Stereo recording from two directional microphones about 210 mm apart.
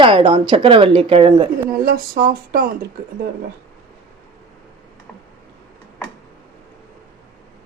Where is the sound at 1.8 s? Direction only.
45° right (ahead or behind).